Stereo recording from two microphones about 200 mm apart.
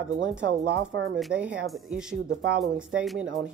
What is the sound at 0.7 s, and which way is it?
Speech, 65° right (ahead or behind).